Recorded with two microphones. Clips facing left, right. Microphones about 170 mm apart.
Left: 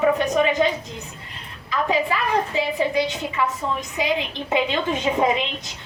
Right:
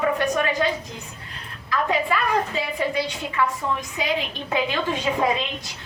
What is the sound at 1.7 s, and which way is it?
A woman's voice, 20° left (ahead or behind).